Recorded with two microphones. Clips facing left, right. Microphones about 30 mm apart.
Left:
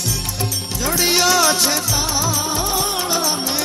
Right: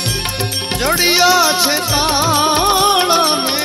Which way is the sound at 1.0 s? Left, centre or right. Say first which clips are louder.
Right 3 dB; right.